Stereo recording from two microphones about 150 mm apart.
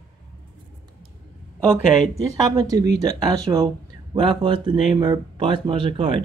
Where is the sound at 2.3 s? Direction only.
25° right (ahead or behind).